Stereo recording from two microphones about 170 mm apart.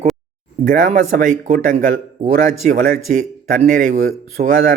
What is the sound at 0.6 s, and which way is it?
Speech, 50° right (ahead or behind).